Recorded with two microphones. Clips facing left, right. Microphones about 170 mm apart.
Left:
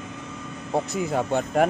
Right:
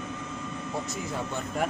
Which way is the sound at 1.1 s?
65° left (ahead or behind).